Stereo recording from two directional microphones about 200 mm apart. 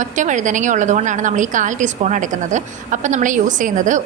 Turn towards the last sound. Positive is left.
turn(degrees=-40)  # may be behind; listen again after turning